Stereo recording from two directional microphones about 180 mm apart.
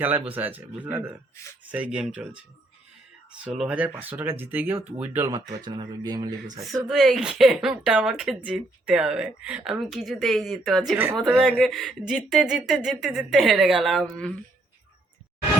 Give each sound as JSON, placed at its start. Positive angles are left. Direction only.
{"t": 0.0, "sound": "speech", "side_deg": -10}
{"t": 3.4, "sound": "speech", "side_deg": -5}
{"t": 5.3, "sound": "speech", "side_deg": -25}
{"t": 6.8, "sound": "speech", "side_deg": 0}